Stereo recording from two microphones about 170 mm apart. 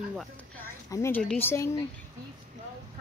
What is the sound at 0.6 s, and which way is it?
A woman's voice, 15° left (ahead or behind).